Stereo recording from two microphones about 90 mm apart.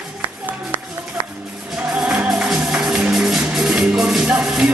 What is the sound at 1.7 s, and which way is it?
Music, 5° right (ahead or behind).